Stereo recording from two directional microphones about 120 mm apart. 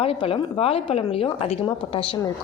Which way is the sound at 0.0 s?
50° left (ahead or behind).